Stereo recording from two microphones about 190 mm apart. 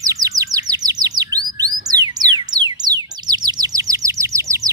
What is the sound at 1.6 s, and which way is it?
Chirp tone, 20° right (ahead or behind).